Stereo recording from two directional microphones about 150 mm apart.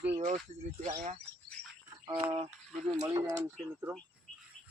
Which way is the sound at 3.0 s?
20° right (ahead or behind).